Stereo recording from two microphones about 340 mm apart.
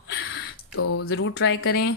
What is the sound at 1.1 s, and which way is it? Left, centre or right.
Speech, left.